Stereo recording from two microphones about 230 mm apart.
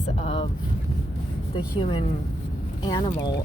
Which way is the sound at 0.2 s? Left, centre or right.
Left.